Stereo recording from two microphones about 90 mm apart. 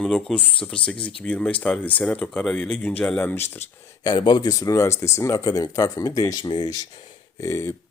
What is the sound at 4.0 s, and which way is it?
Speech, 50° left (ahead or behind).